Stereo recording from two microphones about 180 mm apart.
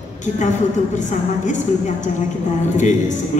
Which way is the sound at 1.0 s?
45° left (ahead or behind).